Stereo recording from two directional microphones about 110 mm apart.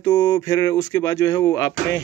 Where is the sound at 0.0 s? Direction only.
40° left (ahead or behind).